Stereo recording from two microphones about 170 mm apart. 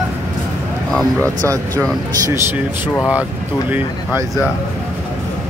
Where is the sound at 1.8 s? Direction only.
15° right (ahead or behind).